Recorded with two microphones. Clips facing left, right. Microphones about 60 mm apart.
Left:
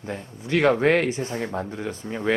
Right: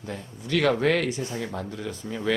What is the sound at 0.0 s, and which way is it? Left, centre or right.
Speech, left.